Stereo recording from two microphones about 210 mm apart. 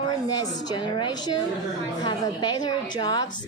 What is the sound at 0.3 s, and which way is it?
A woman's voice, 20° left (ahead or behind).